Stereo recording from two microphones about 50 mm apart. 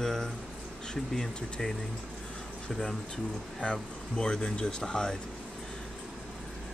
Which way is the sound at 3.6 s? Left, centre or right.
Centre.